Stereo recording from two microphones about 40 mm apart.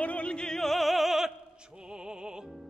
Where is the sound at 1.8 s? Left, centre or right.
Centre.